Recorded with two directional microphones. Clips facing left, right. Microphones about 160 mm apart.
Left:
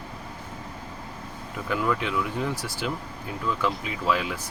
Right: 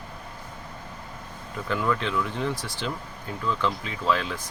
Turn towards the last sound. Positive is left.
turn(degrees=10)  # may be behind; listen again after turning